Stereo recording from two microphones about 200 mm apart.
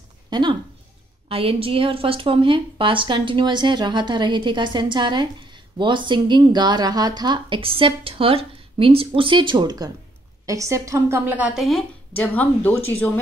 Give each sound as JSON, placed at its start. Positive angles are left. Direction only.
{"t": 0.3, "sound": "a woman's voice", "side_deg": -25}